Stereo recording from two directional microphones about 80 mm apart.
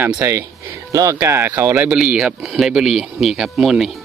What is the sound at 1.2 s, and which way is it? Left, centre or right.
Speech, right.